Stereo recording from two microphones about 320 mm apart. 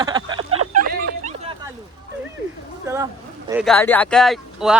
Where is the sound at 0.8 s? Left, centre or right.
Right.